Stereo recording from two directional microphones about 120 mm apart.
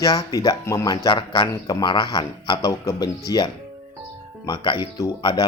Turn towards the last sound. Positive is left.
turn(degrees=35)  # may be behind; listen again after turning